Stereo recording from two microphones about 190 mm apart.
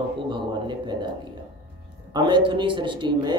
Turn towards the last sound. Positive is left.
turn(degrees=-25)  # may be behind; listen again after turning